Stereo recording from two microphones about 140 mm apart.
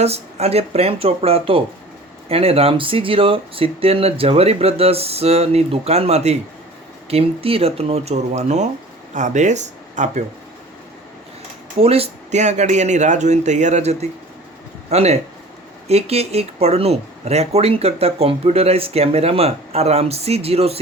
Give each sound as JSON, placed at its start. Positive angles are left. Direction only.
{"t": 0.0, "sound": "speech", "side_deg": -50}
{"t": 11.8, "sound": "speech", "side_deg": -45}